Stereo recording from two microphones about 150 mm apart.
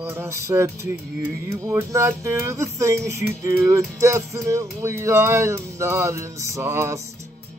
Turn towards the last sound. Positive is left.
turn(degrees=-20)  # may be behind; listen again after turning